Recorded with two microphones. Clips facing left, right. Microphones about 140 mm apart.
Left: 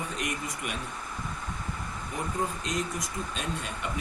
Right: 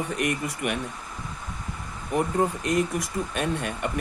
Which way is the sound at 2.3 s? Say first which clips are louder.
Right 6 dB; 60° right (ahead or behind).